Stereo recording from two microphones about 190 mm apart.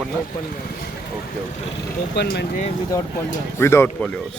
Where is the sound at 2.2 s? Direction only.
60° left (ahead or behind).